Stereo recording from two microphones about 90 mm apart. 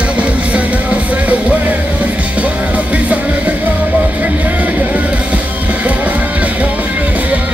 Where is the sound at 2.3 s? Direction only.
15° right (ahead or behind).